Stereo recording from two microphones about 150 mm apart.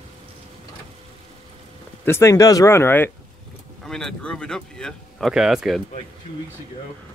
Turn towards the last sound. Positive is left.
turn(degrees=-5)  # may be behind; listen again after turning